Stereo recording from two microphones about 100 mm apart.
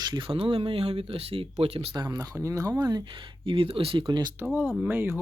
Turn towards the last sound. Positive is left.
turn(degrees=-20)  # may be behind; listen again after turning